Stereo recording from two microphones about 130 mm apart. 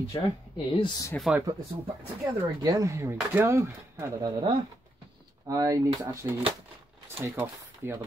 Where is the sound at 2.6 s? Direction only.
25° right (ahead or behind).